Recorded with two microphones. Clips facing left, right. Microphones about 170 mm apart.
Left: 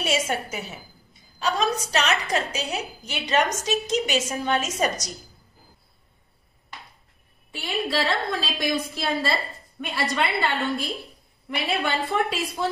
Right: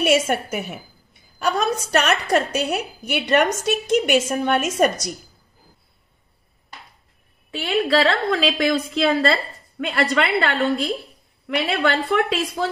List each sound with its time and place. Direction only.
0.0 s a woman's voice: 60° right (ahead or behind)
7.5 s a woman's voice: 70° right (ahead or behind)
10.1 s a woman's voice: 80° right
11.4 s a woman's voice: 70° right (ahead or behind)